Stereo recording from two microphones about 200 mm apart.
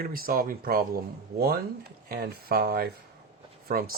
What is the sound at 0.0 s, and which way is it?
Speech, 45° right (ahead or behind).